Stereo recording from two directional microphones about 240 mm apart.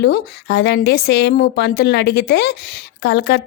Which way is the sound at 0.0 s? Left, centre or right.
Left.